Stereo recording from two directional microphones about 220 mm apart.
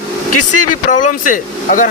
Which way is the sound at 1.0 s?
35° left (ahead or behind).